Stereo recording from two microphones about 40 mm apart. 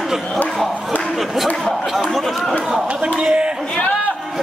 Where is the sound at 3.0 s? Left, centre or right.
Right.